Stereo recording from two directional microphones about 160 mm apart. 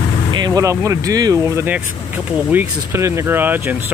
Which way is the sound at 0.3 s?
25° right (ahead or behind).